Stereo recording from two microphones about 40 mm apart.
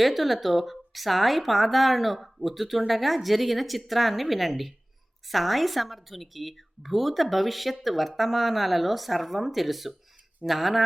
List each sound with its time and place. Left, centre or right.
0.0 s speech: centre